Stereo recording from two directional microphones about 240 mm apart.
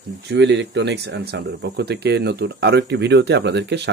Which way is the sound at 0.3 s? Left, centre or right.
Right.